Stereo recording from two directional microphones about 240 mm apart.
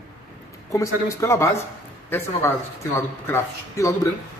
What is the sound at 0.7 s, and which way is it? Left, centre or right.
Speech, centre.